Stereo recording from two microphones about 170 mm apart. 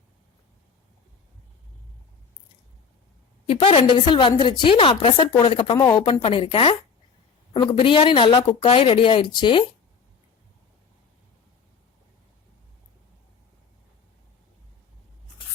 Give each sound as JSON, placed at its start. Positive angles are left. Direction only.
{"t": 3.4, "sound": "a woman's voice", "side_deg": 30}